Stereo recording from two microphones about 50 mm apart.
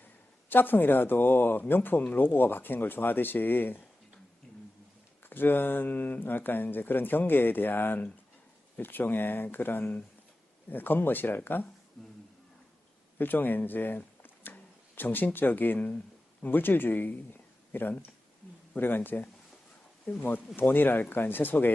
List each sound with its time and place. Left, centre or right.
0.5 s speech: left
4.5 s a sound: centre
5.3 s speech: left
13.1 s speech: left